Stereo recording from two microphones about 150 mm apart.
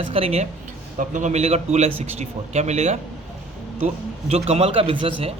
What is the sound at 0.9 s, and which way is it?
A man's voice, 55° right (ahead or behind).